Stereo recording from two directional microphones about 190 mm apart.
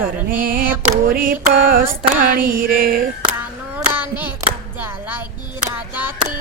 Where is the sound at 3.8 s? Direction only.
10° right (ahead or behind).